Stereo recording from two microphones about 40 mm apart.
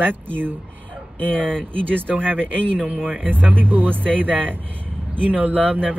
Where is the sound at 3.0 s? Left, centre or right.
Centre.